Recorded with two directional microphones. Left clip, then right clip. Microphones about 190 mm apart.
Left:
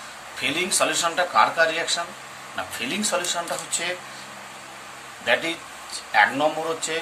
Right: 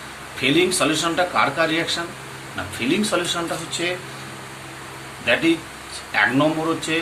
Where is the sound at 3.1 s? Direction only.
30° left (ahead or behind).